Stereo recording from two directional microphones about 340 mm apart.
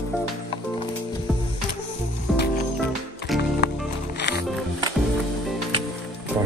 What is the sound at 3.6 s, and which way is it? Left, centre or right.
Music, left.